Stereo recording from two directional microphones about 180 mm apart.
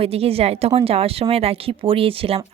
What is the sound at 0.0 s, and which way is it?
Speech, 35° right (ahead or behind).